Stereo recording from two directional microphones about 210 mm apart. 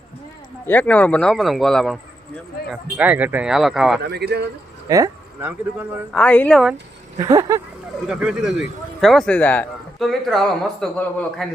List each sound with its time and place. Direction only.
0.6 s speech: 10° left (ahead or behind)
4.0 s speech: 50° right (ahead or behind)
4.9 s speech: 15° right (ahead or behind)
6.1 s speech: 5° left (ahead or behind)
7.2 s speech: 15° right (ahead or behind)
8.0 s speech: 5° right (ahead or behind)